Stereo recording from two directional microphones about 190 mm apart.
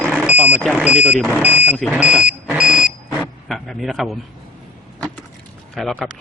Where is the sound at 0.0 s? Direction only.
Centre (ahead or behind).